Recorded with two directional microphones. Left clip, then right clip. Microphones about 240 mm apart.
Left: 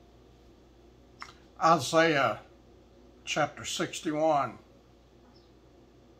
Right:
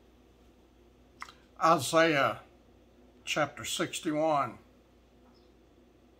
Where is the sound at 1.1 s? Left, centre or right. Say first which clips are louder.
Left 1 dB; centre.